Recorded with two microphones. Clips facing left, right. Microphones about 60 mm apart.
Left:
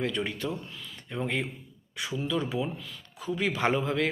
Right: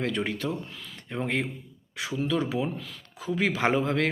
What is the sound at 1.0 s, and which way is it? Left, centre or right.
Speech, right.